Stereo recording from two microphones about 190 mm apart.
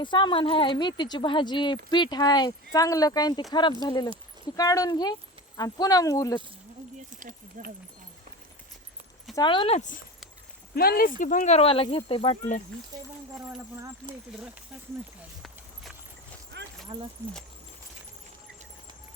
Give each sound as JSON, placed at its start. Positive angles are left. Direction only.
{"t": 0.0, "sound": "speech", "side_deg": 25}
{"t": 7.1, "sound": "a sound", "side_deg": -45}
{"t": 9.3, "sound": "speech", "side_deg": 25}
{"t": 10.8, "sound": "speech", "side_deg": 50}
{"t": 16.9, "sound": "speech", "side_deg": -25}